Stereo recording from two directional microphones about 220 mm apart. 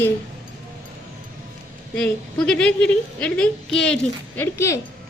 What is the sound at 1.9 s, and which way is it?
A woman's voice, 5° left (ahead or behind).